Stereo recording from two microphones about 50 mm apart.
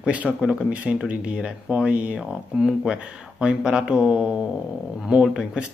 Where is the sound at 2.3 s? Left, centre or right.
Centre.